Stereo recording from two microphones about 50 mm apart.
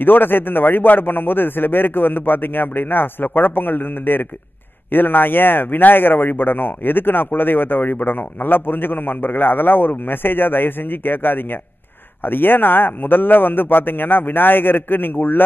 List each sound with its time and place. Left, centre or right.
0.0 s a man's voice: left